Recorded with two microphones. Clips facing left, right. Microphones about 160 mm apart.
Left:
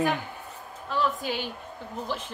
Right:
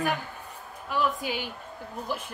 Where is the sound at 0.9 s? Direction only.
10° right (ahead or behind).